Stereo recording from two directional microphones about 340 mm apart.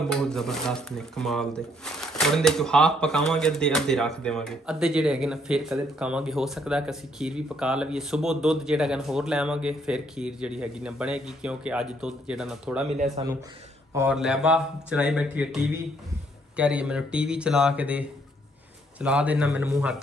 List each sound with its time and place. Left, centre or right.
0.1 s speech: centre
12.9 s speech: centre
13.9 s speech: centre